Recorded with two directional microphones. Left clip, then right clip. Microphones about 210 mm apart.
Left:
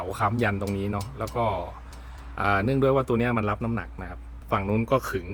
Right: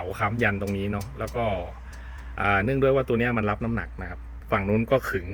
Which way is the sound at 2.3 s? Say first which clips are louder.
Right 1 dB; 10° left (ahead or behind).